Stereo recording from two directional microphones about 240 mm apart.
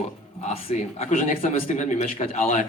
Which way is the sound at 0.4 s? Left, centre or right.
Left.